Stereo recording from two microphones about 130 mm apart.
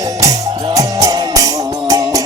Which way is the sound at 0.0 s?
25° right (ahead or behind).